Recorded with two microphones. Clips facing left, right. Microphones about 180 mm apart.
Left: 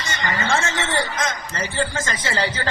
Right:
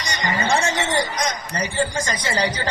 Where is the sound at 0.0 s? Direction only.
15° right (ahead or behind).